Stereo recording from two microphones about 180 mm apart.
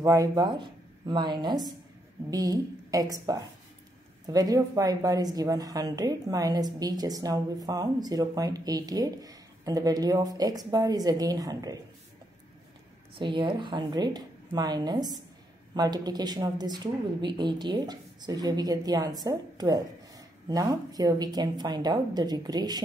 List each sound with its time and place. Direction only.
0.0 s a woman's voice: 20° right (ahead or behind)
13.2 s a woman's voice: 25° right (ahead or behind)